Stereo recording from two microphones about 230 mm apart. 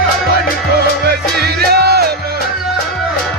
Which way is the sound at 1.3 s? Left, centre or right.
Right.